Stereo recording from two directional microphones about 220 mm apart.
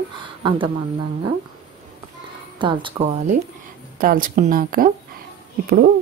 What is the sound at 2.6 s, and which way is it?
Speech, 20° right (ahead or behind).